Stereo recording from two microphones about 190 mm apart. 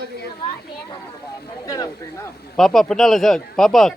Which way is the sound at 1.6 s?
20° left (ahead or behind).